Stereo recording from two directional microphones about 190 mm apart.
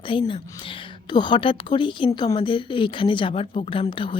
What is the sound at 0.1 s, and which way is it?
A woman's voice, 25° left (ahead or behind).